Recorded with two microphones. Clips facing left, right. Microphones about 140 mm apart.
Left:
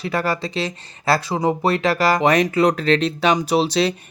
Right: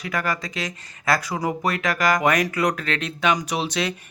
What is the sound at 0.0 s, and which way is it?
Speech, 30° left (ahead or behind).